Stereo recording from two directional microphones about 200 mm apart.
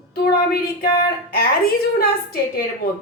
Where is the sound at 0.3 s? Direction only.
50° left (ahead or behind).